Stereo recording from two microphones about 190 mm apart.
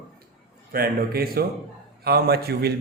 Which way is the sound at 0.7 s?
50° right (ahead or behind).